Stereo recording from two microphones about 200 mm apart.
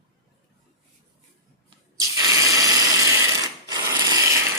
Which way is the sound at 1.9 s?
15° right (ahead or behind).